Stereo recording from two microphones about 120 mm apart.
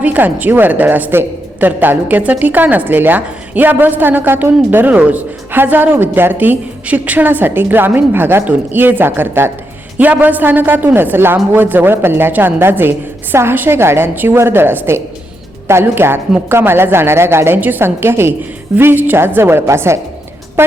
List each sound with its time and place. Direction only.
0.0 s a woman's voice: 15° right (ahead or behind)